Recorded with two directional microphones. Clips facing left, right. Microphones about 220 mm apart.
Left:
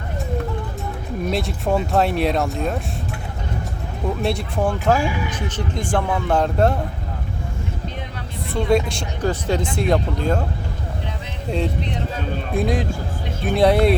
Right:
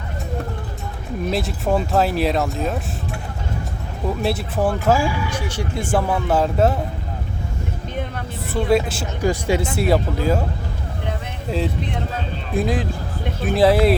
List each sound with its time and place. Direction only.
1.3 s speech: centre (ahead or behind)
4.2 s speech: 5° right (ahead or behind)
4.9 s speech: 20° left (ahead or behind)
5.4 s speech: 10° right (ahead or behind)
8.5 s speech: 5° right (ahead or behind)
12.5 s speech: centre (ahead or behind)